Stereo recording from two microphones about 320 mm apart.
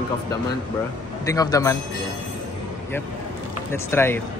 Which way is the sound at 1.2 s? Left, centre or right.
Centre.